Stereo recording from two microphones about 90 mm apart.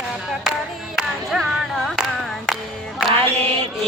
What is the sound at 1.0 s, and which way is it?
Singing, centre (ahead or behind).